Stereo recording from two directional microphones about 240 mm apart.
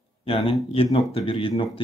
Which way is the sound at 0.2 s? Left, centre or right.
Left.